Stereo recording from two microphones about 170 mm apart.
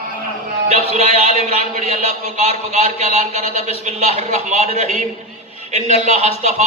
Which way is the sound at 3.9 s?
40° right (ahead or behind).